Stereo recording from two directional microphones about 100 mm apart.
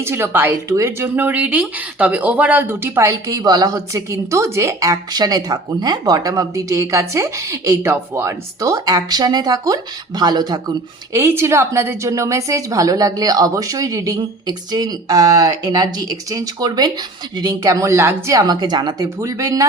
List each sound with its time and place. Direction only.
0.0 s speech: 25° right (ahead or behind); by 10.6 s 40° right (ahead or behind)
11.1 s speech: 25° right (ahead or behind)